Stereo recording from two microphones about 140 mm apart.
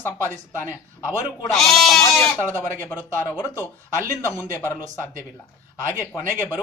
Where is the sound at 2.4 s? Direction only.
15° left (ahead or behind).